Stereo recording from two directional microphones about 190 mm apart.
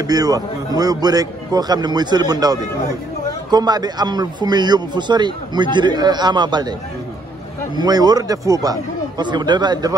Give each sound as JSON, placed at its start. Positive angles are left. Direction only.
{"t": 0.0, "sound": "speech", "side_deg": -20}
{"t": 7.7, "sound": "speech", "side_deg": -20}